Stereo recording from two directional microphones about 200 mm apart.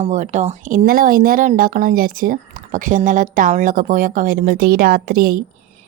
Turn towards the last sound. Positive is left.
turn(degrees=-45)  # may be behind; listen again after turning